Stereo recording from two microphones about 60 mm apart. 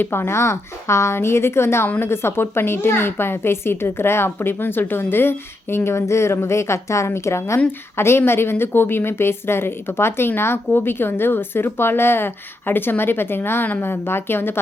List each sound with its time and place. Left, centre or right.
0.0 s a woman's voice: left